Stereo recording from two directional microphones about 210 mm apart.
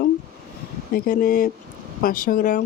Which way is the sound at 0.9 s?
45° left (ahead or behind).